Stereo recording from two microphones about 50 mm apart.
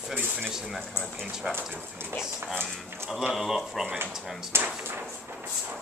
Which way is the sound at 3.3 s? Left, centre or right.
Centre.